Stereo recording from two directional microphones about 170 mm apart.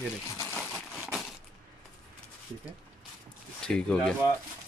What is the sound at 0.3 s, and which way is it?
Crumpling, 15° left (ahead or behind).